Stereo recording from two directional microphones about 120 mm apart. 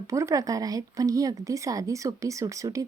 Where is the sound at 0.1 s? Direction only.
25° right (ahead or behind).